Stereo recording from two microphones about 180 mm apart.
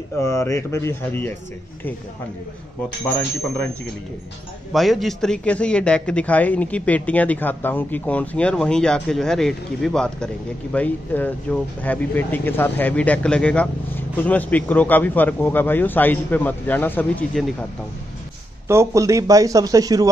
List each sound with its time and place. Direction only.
0.2 s a man's voice: 15° left (ahead or behind)
4.7 s a man's voice: centre (ahead or behind)
18.7 s speech: 15° right (ahead or behind)